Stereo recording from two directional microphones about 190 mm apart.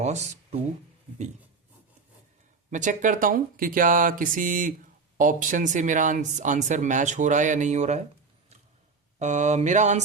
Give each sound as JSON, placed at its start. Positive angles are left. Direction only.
{"t": 0.0, "sound": "speech", "side_deg": -35}
{"t": 2.6, "sound": "speech", "side_deg": -40}
{"t": 9.1, "sound": "speech", "side_deg": -40}